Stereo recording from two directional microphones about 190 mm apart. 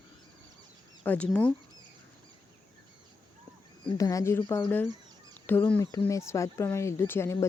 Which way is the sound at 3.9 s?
15° left (ahead or behind).